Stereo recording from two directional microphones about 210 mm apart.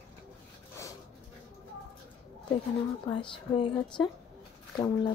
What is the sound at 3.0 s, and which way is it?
Speech, 20° left (ahead or behind).